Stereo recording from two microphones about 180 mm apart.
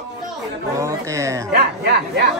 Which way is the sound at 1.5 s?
60° right (ahead or behind).